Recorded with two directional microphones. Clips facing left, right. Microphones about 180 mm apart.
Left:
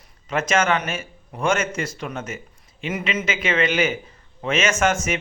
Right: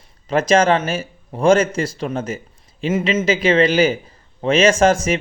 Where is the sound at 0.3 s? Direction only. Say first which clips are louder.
Right 6 dB; 35° right (ahead or behind).